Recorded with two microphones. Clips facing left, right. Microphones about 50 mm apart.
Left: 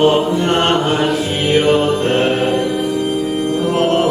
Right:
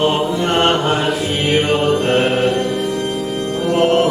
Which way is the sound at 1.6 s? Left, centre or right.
Centre.